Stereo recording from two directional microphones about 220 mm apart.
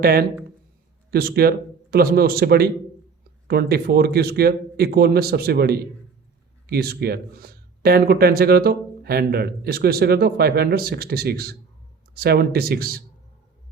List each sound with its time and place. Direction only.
0.0 s speech: 45° right (ahead or behind)